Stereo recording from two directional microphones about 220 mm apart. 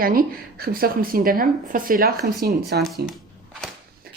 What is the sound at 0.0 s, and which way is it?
Speech, 40° right (ahead or behind).